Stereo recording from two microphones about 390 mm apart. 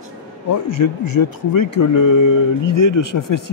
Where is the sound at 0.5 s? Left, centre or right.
Left.